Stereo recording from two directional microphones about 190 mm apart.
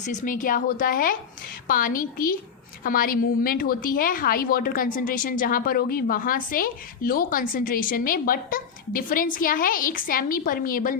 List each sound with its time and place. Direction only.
0.0 s a woman's voice: 40° left (ahead or behind)